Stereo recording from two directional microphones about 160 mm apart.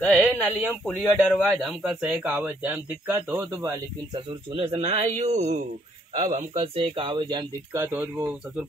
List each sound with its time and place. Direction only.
0.1 s a man's voice: 5° left (ahead or behind); by 3.7 s 15° right (ahead or behind)
4.6 s a man's voice: 40° right (ahead or behind)
7.7 s a man's voice: 15° right (ahead or behind)